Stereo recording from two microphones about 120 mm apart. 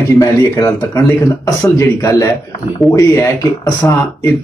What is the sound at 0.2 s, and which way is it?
Speech, 30° left (ahead or behind).